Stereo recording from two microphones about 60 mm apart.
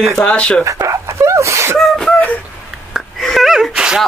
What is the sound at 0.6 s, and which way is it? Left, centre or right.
Sneeze, right.